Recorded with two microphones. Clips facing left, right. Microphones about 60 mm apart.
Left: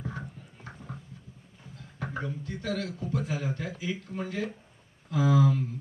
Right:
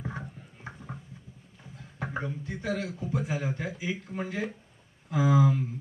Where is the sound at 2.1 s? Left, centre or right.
Right.